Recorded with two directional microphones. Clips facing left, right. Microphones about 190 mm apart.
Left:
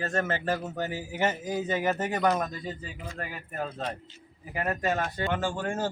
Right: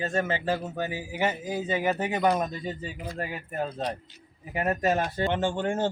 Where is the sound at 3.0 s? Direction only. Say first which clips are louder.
Right 4 dB; 35° right (ahead or behind).